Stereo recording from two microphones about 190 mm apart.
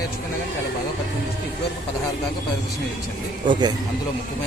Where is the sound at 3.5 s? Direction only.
20° right (ahead or behind).